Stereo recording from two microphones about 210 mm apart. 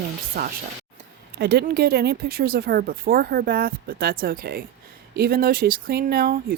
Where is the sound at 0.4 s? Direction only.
40° right (ahead or behind).